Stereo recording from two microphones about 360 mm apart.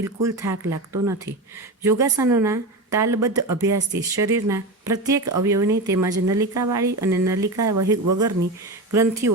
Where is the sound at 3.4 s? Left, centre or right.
Right.